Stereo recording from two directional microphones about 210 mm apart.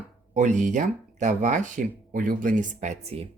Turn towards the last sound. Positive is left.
turn(degrees=-30)  # may be behind; listen again after turning